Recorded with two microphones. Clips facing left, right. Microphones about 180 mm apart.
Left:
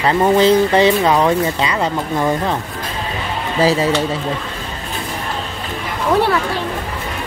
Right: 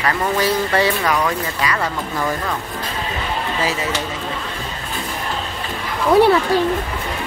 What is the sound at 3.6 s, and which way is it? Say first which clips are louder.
Speech: left 11 dB; 35° left (ahead or behind).